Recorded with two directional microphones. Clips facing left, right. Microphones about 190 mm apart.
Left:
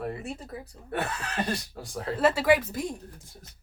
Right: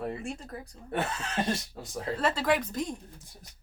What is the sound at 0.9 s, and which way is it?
Speech, 25° right (ahead or behind).